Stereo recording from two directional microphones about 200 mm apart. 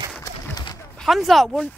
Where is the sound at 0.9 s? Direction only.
Centre (ahead or behind).